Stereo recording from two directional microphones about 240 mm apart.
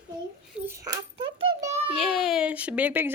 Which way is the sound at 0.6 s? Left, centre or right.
Centre.